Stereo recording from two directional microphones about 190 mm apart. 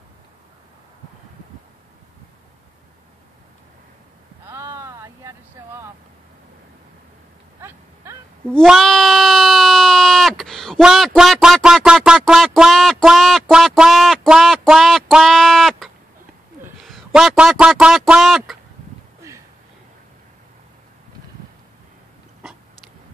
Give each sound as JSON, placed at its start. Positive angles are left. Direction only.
{"t": 4.5, "sound": "vehicle", "side_deg": -15}
{"t": 7.6, "sound": "a sound", "side_deg": -15}
{"t": 8.5, "sound": "a man's voice", "side_deg": 0}